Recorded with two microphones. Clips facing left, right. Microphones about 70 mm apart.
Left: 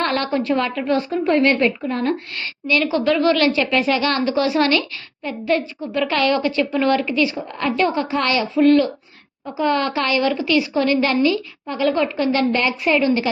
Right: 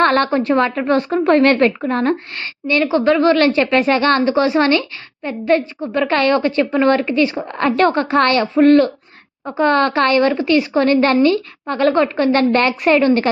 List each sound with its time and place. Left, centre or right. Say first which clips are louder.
0.0 s a woman's voice: right 6 dB; right
1.2 s speech: right 4 dB; right
1.9 s a woman's voice: right 4 dB; right